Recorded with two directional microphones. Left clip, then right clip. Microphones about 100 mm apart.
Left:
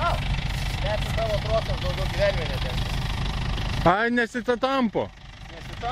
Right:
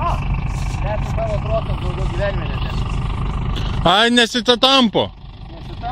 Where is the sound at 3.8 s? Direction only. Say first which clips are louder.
Right 8 dB; 35° right (ahead or behind).